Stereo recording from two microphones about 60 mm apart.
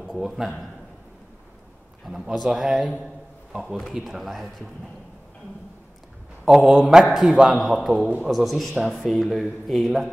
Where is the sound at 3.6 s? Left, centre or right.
Centre.